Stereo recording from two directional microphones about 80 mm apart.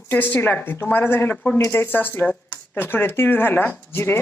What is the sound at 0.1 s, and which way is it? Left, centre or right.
Speech, left.